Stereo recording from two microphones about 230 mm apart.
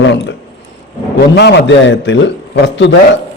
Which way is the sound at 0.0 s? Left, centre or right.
Left.